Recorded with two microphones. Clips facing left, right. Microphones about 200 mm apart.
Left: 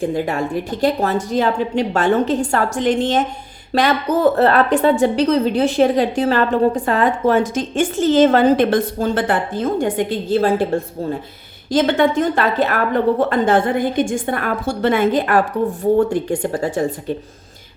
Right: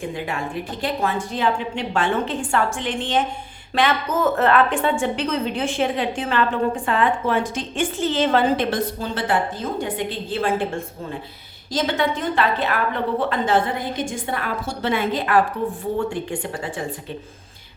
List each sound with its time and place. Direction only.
0.0 s speech: 40° left (ahead or behind)
11.7 s a woman's voice: 50° left (ahead or behind)